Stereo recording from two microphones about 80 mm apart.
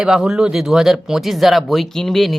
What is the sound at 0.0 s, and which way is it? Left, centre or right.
Speech, centre.